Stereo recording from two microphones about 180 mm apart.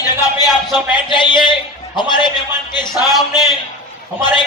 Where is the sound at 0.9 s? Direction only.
25° left (ahead or behind).